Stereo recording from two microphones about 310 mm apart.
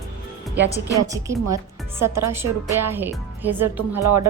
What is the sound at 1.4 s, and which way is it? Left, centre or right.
Speech, right.